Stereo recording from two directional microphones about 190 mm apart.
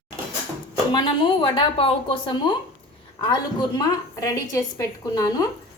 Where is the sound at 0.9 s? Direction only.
25° left (ahead or behind).